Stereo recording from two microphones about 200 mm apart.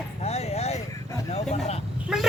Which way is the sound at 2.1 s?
Centre (ahead or behind).